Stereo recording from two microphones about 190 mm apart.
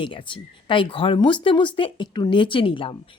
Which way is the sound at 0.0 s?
25° left (ahead or behind).